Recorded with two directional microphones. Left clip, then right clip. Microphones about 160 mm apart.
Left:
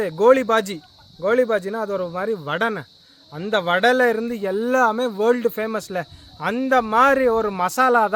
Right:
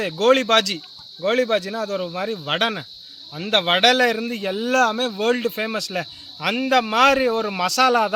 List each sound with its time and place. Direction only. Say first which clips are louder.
0.0 s speech: left 2 dB; 20° left (ahead or behind)